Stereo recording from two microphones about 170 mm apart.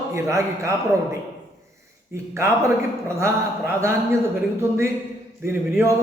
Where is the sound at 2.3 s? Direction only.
15° right (ahead or behind).